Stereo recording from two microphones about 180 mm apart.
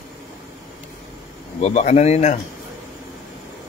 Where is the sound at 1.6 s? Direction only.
40° left (ahead or behind).